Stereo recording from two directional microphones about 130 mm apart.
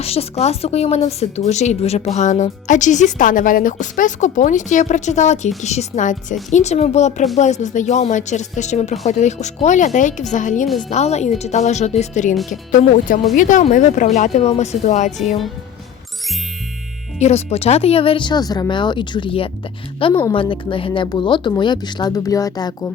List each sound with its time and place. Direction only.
0.0 s speech: 50° left (ahead or behind); by 6.3 s 70° left (ahead or behind)
6.5 s speech: 60° left (ahead or behind)
10.8 s speech: 60° left (ahead or behind)
13.3 s speech: 85° left; by 15.1 s 65° left (ahead or behind)
17.2 s speech: 55° left (ahead or behind); by 22.9 s 30° left (ahead or behind)